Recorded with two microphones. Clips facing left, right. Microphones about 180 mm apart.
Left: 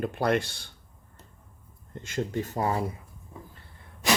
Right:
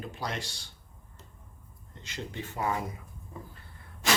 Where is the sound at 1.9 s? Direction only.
50° left (ahead or behind); by 2.8 s 35° left (ahead or behind).